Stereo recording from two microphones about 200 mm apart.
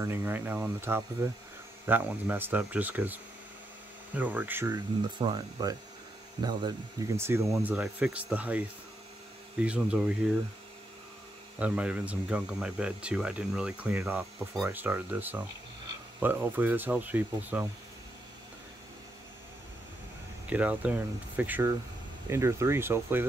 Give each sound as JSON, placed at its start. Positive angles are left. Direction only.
{"t": 0.0, "sound": "speech", "side_deg": -10}
{"t": 11.6, "sound": "speech", "side_deg": -5}
{"t": 20.4, "sound": "speech", "side_deg": -5}